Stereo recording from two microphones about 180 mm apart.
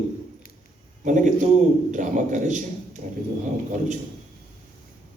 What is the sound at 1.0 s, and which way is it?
A man's voice, 45° right (ahead or behind).